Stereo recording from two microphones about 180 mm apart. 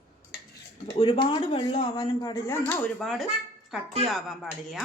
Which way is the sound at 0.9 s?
30° left (ahead or behind).